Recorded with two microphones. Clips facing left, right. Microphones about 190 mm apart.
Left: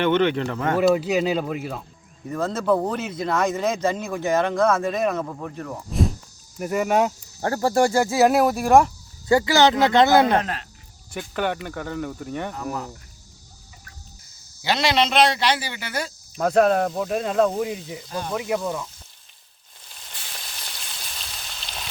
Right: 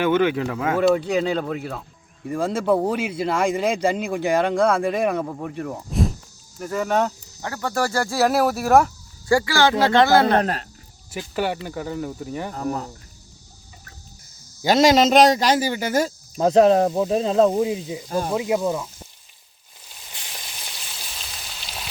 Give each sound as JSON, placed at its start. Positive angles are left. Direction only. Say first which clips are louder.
{"t": 0.0, "sound": "speech", "louder": "right 1 dB", "side_deg": -5}
{"t": 0.8, "sound": "speech", "louder": "even", "side_deg": 5}
{"t": 2.2, "sound": "speech", "louder": "right 1 dB", "side_deg": -10}
{"t": 5.9, "sound": "cricket", "louder": "even", "side_deg": 0}
{"t": 6.6, "sound": "speech", "louder": "left 1 dB", "side_deg": 10}
{"t": 7.4, "sound": "speech", "louder": "left 5 dB", "side_deg": 35}
{"t": 8.0, "sound": "speech", "louder": "left 2 dB", "side_deg": 0}
{"t": 9.3, "sound": "speech", "louder": "left 1 dB", "side_deg": 20}
{"t": 10.4, "sound": "speech", "louder": "right 5 dB", "side_deg": -40}
{"t": 11.1, "sound": "speech", "louder": "right 1 dB", "side_deg": -5}
{"t": 12.5, "sound": "speech", "louder": "right 3 dB", "side_deg": -35}
{"t": 14.6, "sound": "speech", "louder": "right 6 dB", "side_deg": -40}
{"t": 16.4, "sound": "speech", "louder": "right 3 dB", "side_deg": -25}
{"t": 19.9, "sound": "a sound", "louder": "right 1 dB", "side_deg": -5}